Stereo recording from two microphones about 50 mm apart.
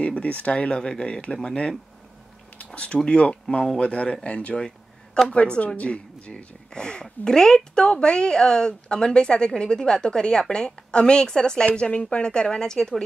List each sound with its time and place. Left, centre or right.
0.0 s speech: left; by 13.0 s centre